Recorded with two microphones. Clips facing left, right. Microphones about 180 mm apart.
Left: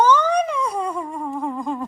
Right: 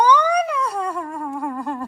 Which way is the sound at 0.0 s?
10° right (ahead or behind).